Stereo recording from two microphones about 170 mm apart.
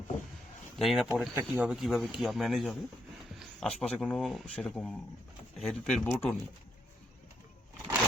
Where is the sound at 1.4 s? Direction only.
15° right (ahead or behind).